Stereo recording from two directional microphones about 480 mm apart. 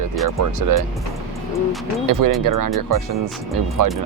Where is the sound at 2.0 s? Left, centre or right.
Right.